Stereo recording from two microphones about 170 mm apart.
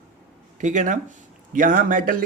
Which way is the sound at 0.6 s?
45° right (ahead or behind).